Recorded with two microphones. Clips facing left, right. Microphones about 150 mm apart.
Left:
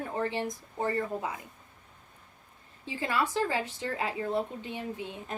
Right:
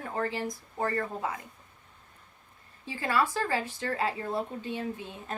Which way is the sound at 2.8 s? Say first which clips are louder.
Right 2 dB; 20° left (ahead or behind).